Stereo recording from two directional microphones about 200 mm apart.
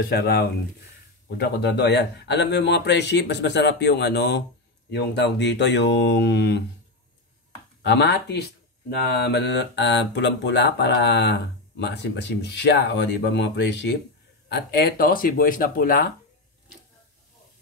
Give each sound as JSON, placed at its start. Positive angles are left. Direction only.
{"t": 0.0, "sound": "speech", "side_deg": 50}
{"t": 7.8, "sound": "speech", "side_deg": 60}